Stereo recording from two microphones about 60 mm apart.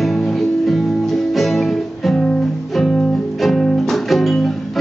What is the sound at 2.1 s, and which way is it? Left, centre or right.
Music, centre.